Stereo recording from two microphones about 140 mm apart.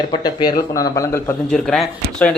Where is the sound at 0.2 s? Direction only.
30° left (ahead or behind).